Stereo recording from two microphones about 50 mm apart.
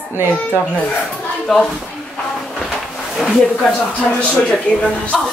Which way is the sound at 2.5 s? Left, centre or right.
Centre.